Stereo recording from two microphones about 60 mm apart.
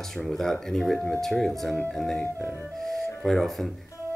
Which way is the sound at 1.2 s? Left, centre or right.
Centre.